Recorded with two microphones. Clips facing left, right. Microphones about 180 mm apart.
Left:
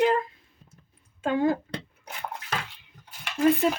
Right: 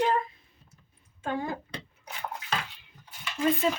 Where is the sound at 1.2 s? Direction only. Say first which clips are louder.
Left 8 dB; 80° left.